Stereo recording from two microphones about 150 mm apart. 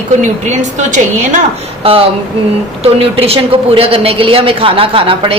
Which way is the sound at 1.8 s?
40° right (ahead or behind).